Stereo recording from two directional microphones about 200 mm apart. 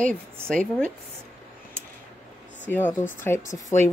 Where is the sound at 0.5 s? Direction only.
5° left (ahead or behind).